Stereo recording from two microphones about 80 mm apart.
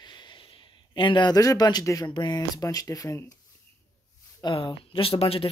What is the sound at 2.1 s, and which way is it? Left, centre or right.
Speech, left.